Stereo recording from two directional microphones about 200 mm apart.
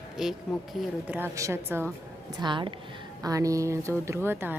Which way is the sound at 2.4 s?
25° right (ahead or behind).